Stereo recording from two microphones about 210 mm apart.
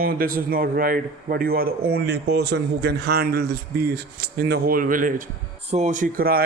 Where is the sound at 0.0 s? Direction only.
45° right (ahead or behind).